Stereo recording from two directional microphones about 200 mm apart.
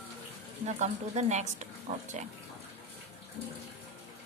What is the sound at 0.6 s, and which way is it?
A woman's voice, 35° right (ahead or behind).